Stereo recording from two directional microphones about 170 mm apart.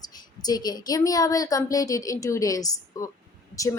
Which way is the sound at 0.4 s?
25° left (ahead or behind).